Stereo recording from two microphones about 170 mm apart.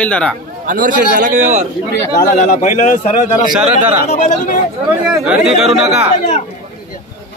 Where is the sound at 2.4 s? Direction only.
50° left (ahead or behind).